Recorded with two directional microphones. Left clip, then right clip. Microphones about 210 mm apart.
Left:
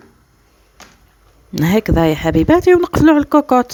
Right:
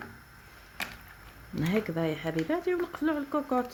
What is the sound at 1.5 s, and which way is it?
Music, 55° left (ahead or behind).